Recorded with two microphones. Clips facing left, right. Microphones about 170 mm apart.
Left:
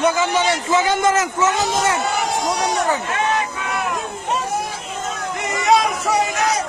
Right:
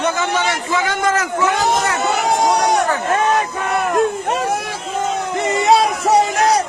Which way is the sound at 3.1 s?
45° right (ahead or behind).